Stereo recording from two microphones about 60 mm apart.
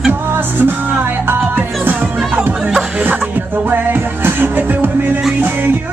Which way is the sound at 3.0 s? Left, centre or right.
Right.